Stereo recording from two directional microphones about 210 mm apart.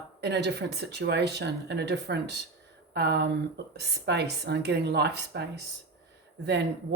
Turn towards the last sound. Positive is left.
turn(degrees=-55)  # may be behind; listen again after turning